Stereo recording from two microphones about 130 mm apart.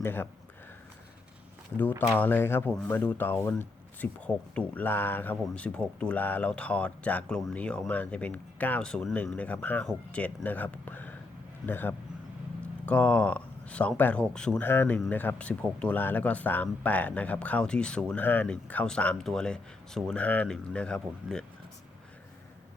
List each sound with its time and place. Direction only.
0.0 s speech: 15° left (ahead or behind)
2.1 s speech: 15° left (ahead or behind)